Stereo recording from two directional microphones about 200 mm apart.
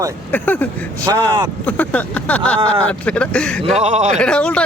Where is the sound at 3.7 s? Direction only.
35° right (ahead or behind).